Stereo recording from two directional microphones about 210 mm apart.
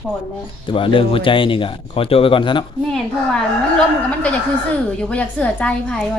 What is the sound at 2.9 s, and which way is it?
A woman's voice, 5° left (ahead or behind).